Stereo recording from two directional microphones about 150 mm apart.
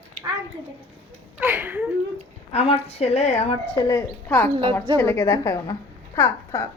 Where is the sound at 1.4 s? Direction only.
10° right (ahead or behind).